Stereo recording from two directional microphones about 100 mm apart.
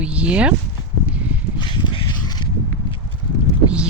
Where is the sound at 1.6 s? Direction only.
50° left (ahead or behind).